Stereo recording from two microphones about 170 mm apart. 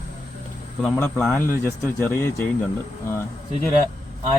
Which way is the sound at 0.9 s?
10° left (ahead or behind).